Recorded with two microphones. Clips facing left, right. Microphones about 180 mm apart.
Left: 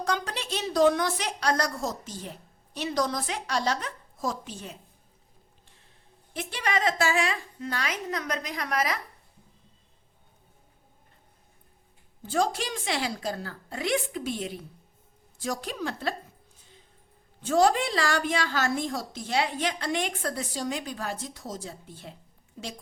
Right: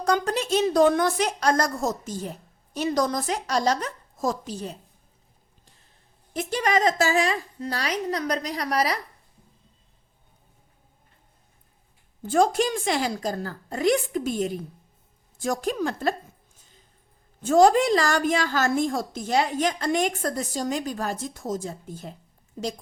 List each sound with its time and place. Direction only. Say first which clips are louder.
0.0 s a woman's voice: right 7 dB; 45° right (ahead or behind)
6.3 s a woman's voice: right 6 dB; 40° right (ahead or behind)
12.2 s a woman's voice: right 6 dB; 50° right (ahead or behind)
17.4 s a woman's voice: right 5 dB; 45° right (ahead or behind)